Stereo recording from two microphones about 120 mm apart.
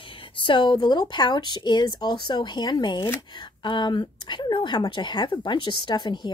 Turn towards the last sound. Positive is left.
turn(degrees=40)  # may be behind; listen again after turning